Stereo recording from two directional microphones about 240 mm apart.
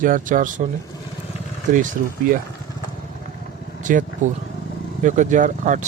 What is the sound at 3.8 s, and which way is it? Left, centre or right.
Speech, right.